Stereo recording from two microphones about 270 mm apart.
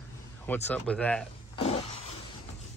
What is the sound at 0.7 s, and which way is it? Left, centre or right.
Speech, centre.